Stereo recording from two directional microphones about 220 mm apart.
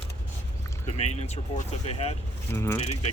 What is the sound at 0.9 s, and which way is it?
Speech, 30° left (ahead or behind).